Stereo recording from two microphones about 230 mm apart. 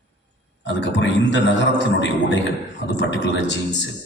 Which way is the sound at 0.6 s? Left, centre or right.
Left.